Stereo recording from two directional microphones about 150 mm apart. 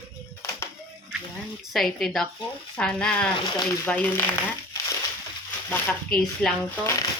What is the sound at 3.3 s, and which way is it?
Speech, 30° left (ahead or behind).